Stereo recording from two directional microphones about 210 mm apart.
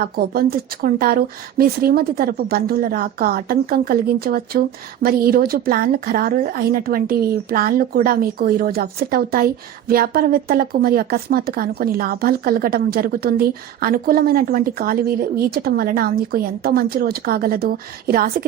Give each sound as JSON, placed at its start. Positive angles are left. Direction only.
{"t": 0.2, "sound": "speech", "side_deg": -45}